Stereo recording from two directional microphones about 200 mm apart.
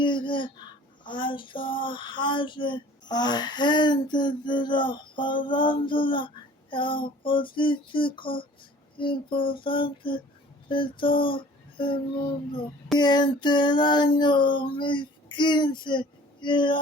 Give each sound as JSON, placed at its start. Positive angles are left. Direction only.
{"t": 0.0, "sound": "child singing", "side_deg": 25}
{"t": 10.7, "sound": "speech", "side_deg": 25}
{"t": 13.0, "sound": "child singing", "side_deg": 20}